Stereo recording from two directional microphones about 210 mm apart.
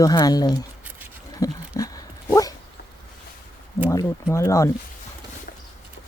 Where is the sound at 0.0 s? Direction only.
20° left (ahead or behind).